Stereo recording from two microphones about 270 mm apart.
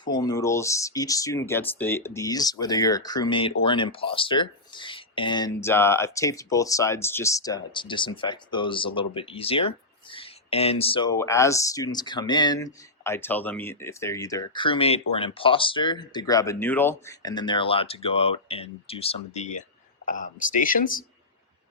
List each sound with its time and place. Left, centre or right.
0.0 s speech: centre; by 21.0 s left